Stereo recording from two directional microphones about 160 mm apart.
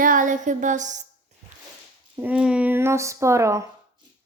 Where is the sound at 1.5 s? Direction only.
45° right (ahead or behind).